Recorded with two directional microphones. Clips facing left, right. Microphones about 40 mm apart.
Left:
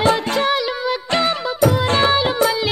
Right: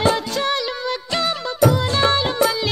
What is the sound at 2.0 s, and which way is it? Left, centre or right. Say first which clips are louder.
Music: left 2 dB; centre.